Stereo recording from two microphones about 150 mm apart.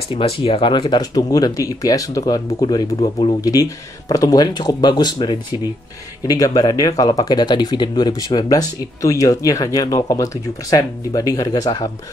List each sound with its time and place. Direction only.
0.1 s speech: 35° left (ahead or behind)
3.0 s speech: 40° left (ahead or behind)
3.3 s speech: 25° left (ahead or behind)